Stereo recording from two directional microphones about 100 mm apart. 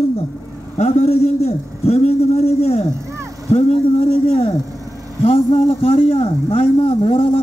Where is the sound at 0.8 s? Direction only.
90° left.